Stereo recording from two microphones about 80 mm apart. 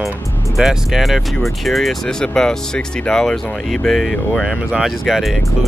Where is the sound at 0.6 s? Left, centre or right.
Centre.